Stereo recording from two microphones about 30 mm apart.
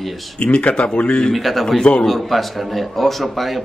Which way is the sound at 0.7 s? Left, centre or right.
Left.